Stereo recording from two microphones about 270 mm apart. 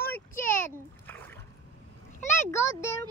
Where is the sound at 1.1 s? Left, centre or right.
Centre.